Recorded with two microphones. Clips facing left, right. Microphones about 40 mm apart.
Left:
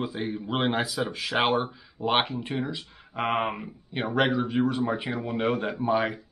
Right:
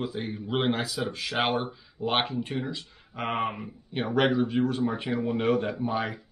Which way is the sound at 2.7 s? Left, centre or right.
Left.